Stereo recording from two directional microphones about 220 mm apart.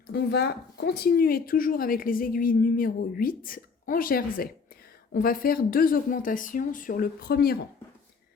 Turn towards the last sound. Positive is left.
turn(degrees=45)  # may be behind; listen again after turning